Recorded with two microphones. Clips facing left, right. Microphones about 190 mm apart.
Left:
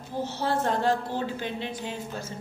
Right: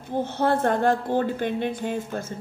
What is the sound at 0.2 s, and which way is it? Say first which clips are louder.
A woman's voice: right 5 dB; 55° right (ahead or behind).